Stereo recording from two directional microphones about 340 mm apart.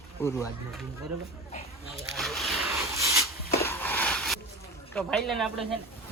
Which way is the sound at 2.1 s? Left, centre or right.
Centre.